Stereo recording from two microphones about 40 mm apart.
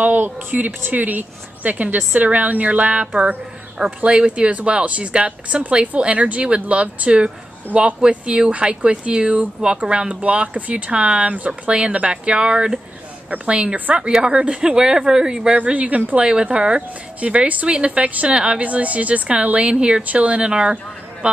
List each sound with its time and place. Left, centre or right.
0.0 s speech: right; by 15.5 s centre
15.5 s speech: right
17.5 s speech: right
18.6 s speech: right
20.0 s speech: right